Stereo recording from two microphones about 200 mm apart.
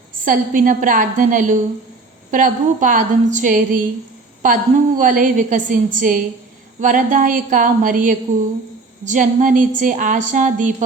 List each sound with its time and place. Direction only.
0.3 s a woman's voice: 40° right (ahead or behind)